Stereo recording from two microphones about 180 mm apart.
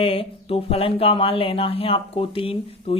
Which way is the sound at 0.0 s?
30° left (ahead or behind).